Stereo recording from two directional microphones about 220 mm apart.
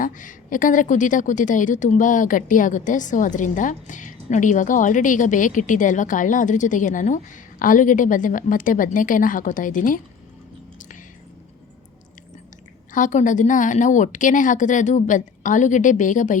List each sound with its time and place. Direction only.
0.0 s a woman's voice: 35° left (ahead or behind)
12.9 s a woman's voice: 35° left (ahead or behind)